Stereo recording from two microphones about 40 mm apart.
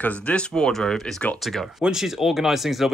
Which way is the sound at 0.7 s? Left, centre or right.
Centre.